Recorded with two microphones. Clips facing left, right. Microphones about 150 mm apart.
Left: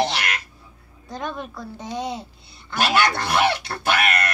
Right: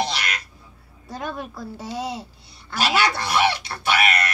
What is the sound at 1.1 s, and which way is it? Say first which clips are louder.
A child's voice: even; 5° right (ahead or behind).